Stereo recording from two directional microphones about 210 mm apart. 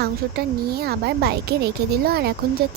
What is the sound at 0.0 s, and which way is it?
Speech, 50° right (ahead or behind).